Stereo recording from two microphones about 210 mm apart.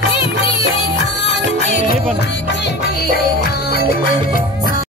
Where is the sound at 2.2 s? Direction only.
55° left (ahead or behind).